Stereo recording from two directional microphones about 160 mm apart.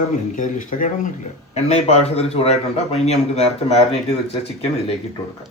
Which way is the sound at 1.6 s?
40° left (ahead or behind).